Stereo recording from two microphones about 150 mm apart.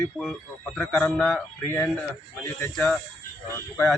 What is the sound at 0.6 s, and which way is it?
Speech, 15° left (ahead or behind).